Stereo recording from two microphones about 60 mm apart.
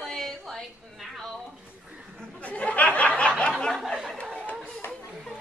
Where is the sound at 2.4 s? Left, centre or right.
Left.